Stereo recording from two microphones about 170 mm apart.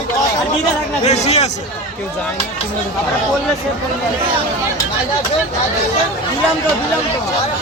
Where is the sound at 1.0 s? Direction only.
40° left (ahead or behind).